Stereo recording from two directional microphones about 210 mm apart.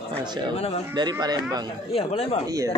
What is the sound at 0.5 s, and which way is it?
Speech, 30° left (ahead or behind).